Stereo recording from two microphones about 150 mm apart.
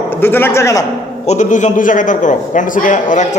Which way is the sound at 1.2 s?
50° left (ahead or behind).